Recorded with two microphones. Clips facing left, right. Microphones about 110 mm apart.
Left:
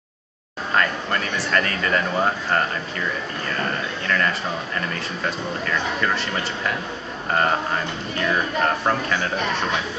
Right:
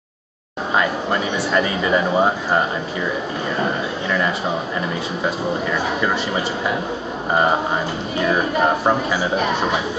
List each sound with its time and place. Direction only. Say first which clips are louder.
1.5 s speech: right 4 dB; 10° right (ahead or behind)